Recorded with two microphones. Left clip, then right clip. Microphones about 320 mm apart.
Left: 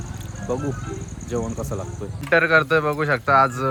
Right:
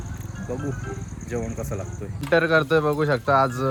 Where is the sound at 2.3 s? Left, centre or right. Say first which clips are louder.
Left 2 dB; centre.